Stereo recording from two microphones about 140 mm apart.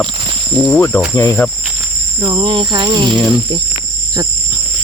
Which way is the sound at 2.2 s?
30° right (ahead or behind).